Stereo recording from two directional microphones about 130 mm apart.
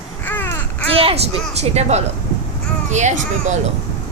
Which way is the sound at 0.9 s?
45° right (ahead or behind).